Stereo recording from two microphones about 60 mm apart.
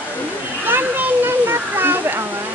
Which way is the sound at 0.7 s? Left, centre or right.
Right.